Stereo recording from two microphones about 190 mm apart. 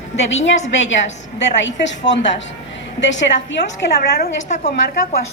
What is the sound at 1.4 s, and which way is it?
A woman's voice, 70° left (ahead or behind).